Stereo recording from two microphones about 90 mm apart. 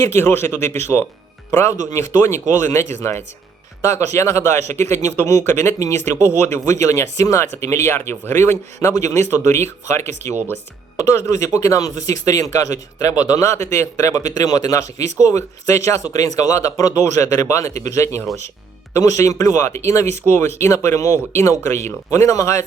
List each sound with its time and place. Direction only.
0.0 s speech: 30° left (ahead or behind)
8.9 s speech: 40° left (ahead or behind)